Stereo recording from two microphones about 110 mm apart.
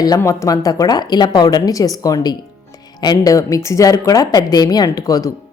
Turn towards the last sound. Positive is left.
turn(degrees=35)  # may be behind; listen again after turning